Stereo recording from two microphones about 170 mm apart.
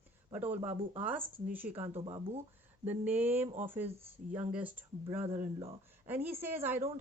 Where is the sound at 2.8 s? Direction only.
10° right (ahead or behind).